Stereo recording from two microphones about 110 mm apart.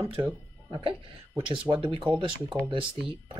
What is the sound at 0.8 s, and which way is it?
Speech, 50° right (ahead or behind).